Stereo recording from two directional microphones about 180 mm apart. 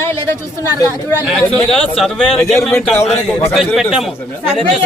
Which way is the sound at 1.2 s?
Centre (ahead or behind).